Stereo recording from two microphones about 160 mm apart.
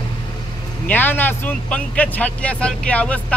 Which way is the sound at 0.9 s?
10° left (ahead or behind).